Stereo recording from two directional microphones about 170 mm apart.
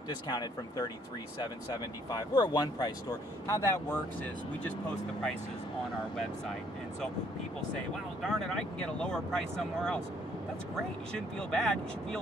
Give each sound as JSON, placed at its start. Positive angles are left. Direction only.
{"t": 0.3, "sound": "speech", "side_deg": 25}
{"t": 2.0, "sound": "speech", "side_deg": 25}
{"t": 8.2, "sound": "speech", "side_deg": 5}
{"t": 11.1, "sound": "speech", "side_deg": 5}